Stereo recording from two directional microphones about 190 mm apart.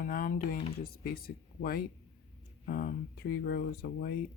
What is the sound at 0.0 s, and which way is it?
Speech, 50° left (ahead or behind).